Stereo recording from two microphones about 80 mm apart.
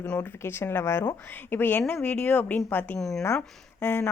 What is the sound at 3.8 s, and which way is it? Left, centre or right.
Speech, left.